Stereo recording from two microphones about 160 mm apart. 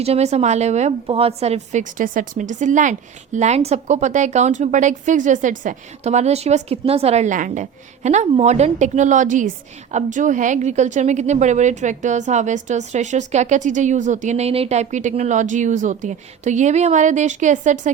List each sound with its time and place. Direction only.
0.0 s a woman's voice: 40° right (ahead or behind)